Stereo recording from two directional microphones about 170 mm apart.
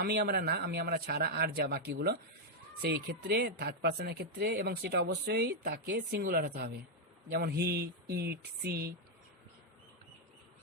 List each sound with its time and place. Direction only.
0.0 s speech: 65° right (ahead or behind)
7.3 s speech: 70° right (ahead or behind)